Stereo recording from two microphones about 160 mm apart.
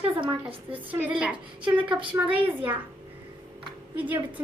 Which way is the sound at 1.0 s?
5° right (ahead or behind).